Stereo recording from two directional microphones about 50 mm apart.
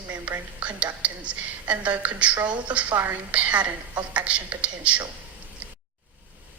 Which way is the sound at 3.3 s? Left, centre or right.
Right.